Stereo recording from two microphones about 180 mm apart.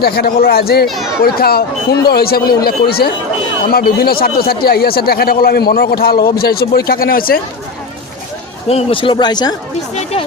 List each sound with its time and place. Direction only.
0.0 s speech: 60° left (ahead or behind)
8.7 s speech: 30° left (ahead or behind)
9.9 s speech: 35° left (ahead or behind)